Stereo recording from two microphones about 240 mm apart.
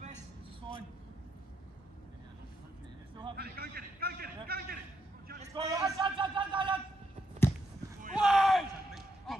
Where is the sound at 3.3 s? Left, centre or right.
Right.